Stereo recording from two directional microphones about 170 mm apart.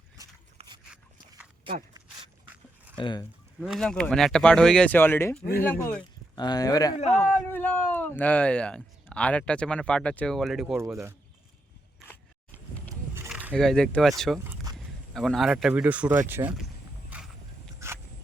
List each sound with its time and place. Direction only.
0.6 s a sound: 35° right (ahead or behind)
1.7 s speech: 30° right (ahead or behind)
3.0 s speech: 25° left (ahead or behind)
3.6 s speech: centre (ahead or behind)
6.3 s speech: 25° left (ahead or behind)
6.9 s speech: 40° left (ahead or behind)
7.2 s speech: 10° left (ahead or behind)
10.8 s speech: 15° right (ahead or behind)
13.1 s a sound: 10° right (ahead or behind)
13.5 s speech: 5° left (ahead or behind)
14.3 s a sound: 20° right (ahead or behind)
15.1 s speech: centre (ahead or behind)
17.7 s a sound: 15° right (ahead or behind)